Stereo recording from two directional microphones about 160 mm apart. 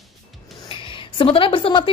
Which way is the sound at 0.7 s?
35° left (ahead or behind).